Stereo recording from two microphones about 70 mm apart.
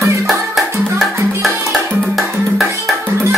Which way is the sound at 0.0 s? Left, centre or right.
Centre.